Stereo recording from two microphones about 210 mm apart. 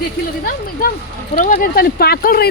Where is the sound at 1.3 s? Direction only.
35° left (ahead or behind).